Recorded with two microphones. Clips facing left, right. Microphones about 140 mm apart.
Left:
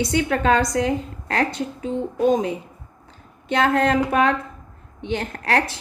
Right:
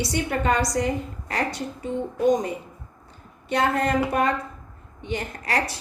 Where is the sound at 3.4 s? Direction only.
90° left.